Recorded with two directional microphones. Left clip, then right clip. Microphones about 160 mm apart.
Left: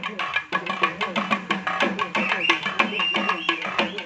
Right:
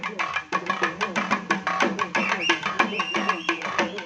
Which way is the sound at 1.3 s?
20° left (ahead or behind).